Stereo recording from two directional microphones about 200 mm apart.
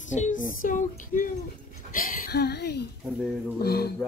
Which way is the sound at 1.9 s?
45° left (ahead or behind).